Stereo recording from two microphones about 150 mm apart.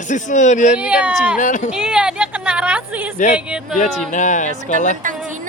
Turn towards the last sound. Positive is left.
turn(degrees=55)  # may be behind; listen again after turning